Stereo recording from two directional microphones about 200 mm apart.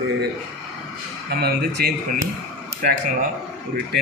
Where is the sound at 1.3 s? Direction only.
50° right (ahead or behind).